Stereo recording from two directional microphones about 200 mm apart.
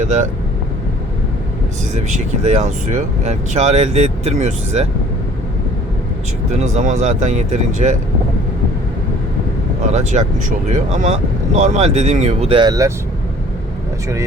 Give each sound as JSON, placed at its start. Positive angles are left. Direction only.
{"t": 0.0, "sound": "speech", "side_deg": -35}
{"t": 2.0, "sound": "speech", "side_deg": -35}
{"t": 6.5, "sound": "speech", "side_deg": -35}
{"t": 9.9, "sound": "speech", "side_deg": -35}